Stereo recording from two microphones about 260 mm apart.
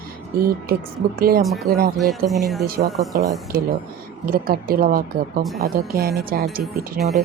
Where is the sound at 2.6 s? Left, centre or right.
Right.